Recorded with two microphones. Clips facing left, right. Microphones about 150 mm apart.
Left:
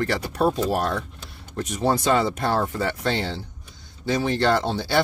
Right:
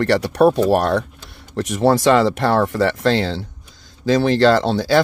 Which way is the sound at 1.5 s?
85° right.